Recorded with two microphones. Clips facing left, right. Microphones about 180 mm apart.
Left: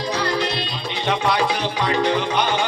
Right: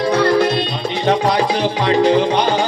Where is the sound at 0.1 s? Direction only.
50° right (ahead or behind).